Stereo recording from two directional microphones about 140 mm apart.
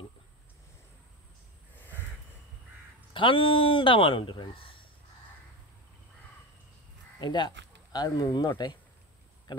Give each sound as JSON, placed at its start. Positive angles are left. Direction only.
{"t": 1.8, "sound": "crow", "side_deg": 15}
{"t": 3.1, "sound": "speech", "side_deg": 40}
{"t": 7.2, "sound": "speech", "side_deg": 30}